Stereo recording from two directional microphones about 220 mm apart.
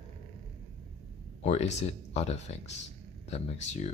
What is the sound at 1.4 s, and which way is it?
Speech, 30° left (ahead or behind).